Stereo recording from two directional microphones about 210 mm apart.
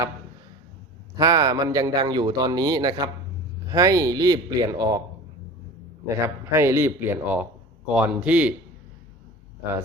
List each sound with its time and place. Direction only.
1.1 s a man's voice: 15° right (ahead or behind)
6.1 s a man's voice: 10° right (ahead or behind)